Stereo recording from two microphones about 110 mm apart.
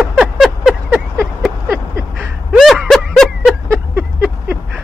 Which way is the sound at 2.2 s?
Centre (ahead or behind).